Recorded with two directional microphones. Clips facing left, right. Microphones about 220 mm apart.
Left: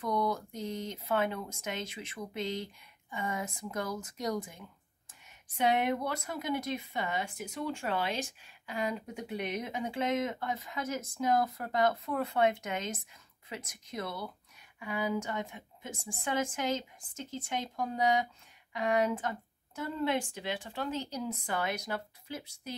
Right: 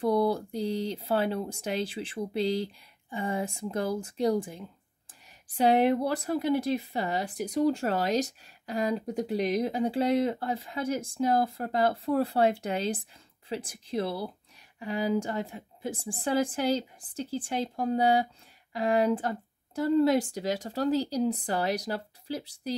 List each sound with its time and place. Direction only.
0.0 s speech: 30° right (ahead or behind)